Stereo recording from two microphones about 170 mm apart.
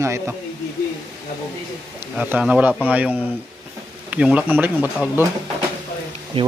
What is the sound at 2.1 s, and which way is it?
Speech, 10° right (ahead or behind).